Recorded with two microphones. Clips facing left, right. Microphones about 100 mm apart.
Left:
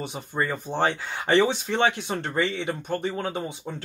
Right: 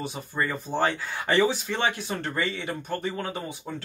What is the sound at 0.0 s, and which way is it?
Speech, 20° left (ahead or behind).